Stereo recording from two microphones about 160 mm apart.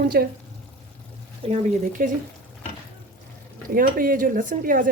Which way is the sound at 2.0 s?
55° right (ahead or behind).